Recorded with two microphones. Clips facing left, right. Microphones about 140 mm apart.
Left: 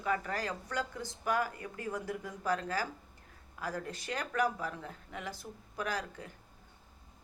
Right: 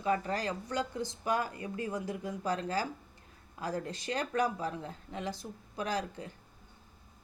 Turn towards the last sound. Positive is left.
turn(degrees=-25)  # may be behind; listen again after turning